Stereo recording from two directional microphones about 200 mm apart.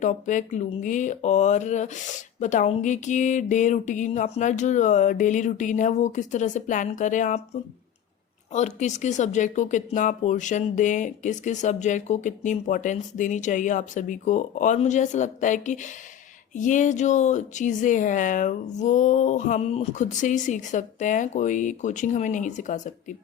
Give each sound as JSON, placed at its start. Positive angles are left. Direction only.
{"t": 0.0, "sound": "speech", "side_deg": 40}
{"t": 8.5, "sound": "speech", "side_deg": 35}